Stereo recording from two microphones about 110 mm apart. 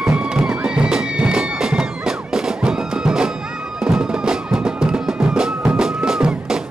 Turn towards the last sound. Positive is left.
turn(degrees=-5)  # may be behind; listen again after turning